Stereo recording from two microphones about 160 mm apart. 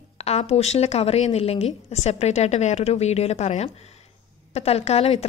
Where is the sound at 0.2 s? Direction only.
40° left (ahead or behind).